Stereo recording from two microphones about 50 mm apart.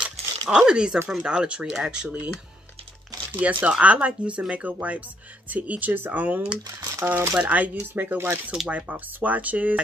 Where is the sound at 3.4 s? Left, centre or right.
Right.